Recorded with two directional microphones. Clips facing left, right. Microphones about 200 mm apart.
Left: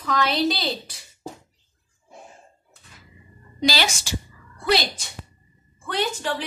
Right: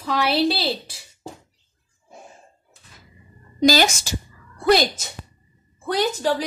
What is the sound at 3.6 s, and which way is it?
A woman's voice, 45° right (ahead or behind).